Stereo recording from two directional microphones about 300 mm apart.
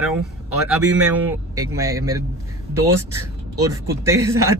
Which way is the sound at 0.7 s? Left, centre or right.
Centre.